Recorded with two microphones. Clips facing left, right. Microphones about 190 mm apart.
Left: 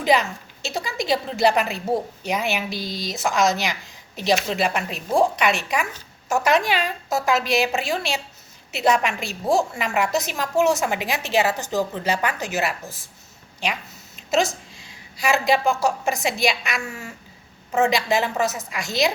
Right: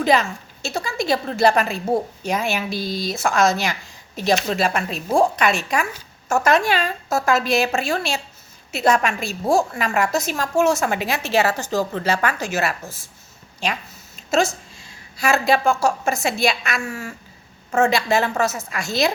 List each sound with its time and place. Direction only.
0.0 s a woman's voice: 15° left (ahead or behind)
14.3 s a woman's voice: 20° left (ahead or behind)